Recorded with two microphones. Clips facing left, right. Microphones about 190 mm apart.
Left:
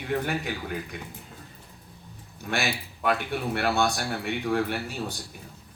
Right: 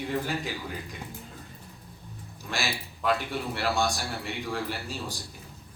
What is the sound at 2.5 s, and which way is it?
A man's voice, 60° left (ahead or behind).